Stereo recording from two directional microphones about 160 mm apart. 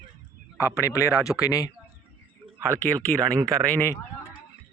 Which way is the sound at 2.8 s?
10° left (ahead or behind).